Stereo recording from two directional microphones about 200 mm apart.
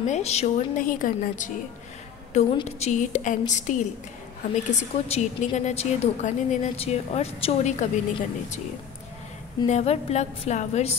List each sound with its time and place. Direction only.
0.0 s a woman's voice: 35° left (ahead or behind)
9.7 s a woman's voice: 35° left (ahead or behind)